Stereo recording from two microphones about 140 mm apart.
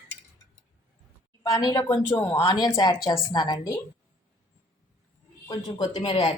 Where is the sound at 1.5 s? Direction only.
25° left (ahead or behind).